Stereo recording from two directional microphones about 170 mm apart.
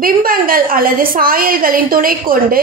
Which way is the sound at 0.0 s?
55° right (ahead or behind).